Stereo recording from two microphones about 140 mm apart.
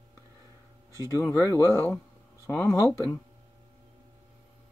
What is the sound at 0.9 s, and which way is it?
Speech, 20° left (ahead or behind).